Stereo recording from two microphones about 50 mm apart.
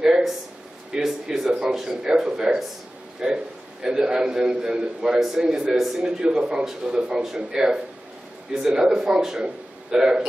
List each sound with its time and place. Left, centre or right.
0.9 s a sound: centre
1.6 s speech: centre
6.0 s speech: centre